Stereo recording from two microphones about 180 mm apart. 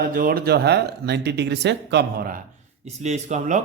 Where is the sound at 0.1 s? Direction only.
50° right (ahead or behind).